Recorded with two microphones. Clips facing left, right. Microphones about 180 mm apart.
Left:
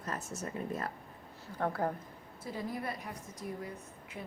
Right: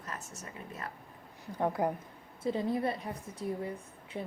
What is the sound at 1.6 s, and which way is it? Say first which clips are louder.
Speech: right 3 dB; 15° right (ahead or behind).